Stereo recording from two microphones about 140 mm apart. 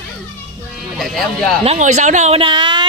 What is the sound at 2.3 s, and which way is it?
Speech, 40° right (ahead or behind).